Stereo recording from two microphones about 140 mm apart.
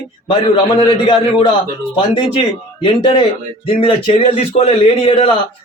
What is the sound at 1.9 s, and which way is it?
A man's voice, 40° left (ahead or behind).